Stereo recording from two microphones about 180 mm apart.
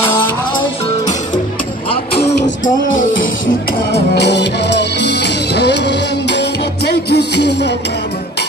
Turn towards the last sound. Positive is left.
turn(degrees=70)  # may be behind; listen again after turning